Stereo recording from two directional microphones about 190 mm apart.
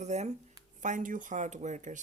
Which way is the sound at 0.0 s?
35° right (ahead or behind).